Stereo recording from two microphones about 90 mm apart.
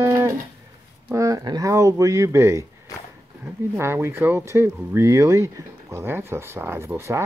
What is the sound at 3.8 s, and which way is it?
Speech, 30° right (ahead or behind).